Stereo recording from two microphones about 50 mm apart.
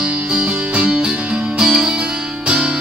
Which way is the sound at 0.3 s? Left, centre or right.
Right.